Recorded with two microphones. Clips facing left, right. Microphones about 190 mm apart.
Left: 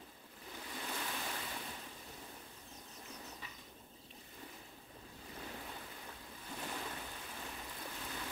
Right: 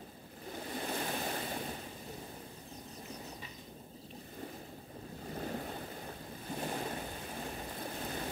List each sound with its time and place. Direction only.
0.5 s waves: 40° right (ahead or behind)
5.2 s waves: 45° right (ahead or behind)